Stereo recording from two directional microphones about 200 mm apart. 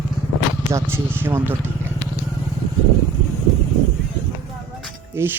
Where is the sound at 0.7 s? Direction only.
10° right (ahead or behind).